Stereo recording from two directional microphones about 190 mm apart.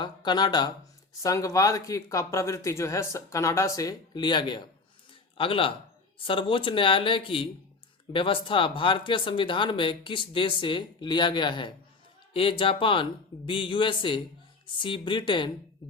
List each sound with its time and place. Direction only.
0.0 s speech: 25° left (ahead or behind)